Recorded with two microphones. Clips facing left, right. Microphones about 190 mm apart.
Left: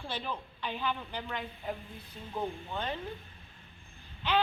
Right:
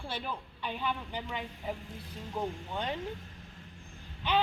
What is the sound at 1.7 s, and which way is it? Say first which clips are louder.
Speech: right 2 dB; 90° right.